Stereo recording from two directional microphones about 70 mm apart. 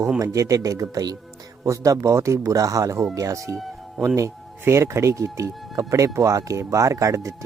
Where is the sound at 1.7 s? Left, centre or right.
Right.